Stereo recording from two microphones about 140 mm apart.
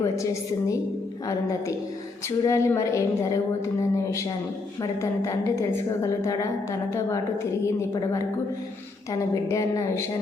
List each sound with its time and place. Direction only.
1.3 s a woman's voice: 25° left (ahead or behind)
9.3 s a woman's voice: 25° left (ahead or behind)